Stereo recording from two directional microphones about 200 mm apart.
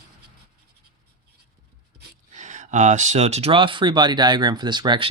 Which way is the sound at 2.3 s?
35° right (ahead or behind).